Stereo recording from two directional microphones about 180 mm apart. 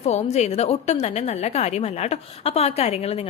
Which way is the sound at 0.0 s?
40° left (ahead or behind).